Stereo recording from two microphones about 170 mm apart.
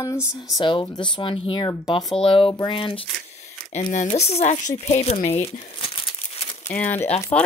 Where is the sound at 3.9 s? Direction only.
40° left (ahead or behind).